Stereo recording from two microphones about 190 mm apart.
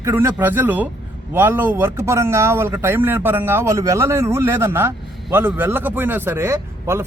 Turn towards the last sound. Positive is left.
turn(degrees=-15)  # may be behind; listen again after turning